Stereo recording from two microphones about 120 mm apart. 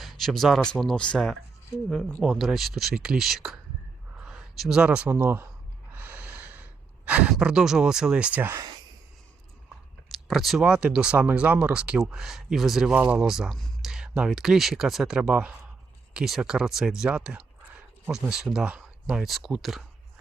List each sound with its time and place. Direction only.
0.0 s speech: centre (ahead or behind); by 5.5 s 15° right (ahead or behind)
5.9 s gasp: 15° right (ahead or behind)
8.5 s speech: 35° right (ahead or behind)
10.1 s speech: centre (ahead or behind)